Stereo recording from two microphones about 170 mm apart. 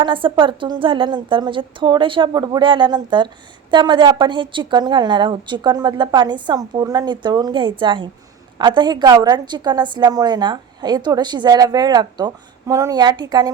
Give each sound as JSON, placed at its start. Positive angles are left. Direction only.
{"t": 0.0, "sound": "a woman's voice", "side_deg": -30}